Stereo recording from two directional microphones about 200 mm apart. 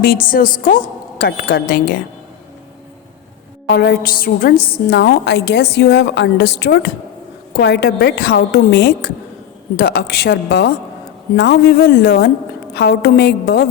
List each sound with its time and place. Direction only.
0.3 s a woman's voice: 45° left (ahead or behind)
3.7 s a woman's voice: 50° left (ahead or behind)
4.5 s a woman's voice: 25° left (ahead or behind)
4.9 s a woman's voice: 60° left (ahead or behind)